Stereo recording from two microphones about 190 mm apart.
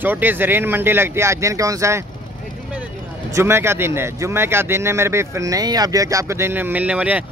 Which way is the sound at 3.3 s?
15° right (ahead or behind).